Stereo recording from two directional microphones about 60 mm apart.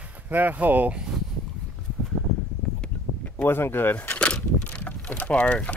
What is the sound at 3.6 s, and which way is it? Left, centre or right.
Speech, left.